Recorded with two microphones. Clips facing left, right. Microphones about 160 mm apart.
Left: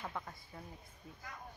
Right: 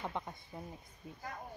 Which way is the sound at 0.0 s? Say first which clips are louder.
Right 4 dB; 20° right (ahead or behind).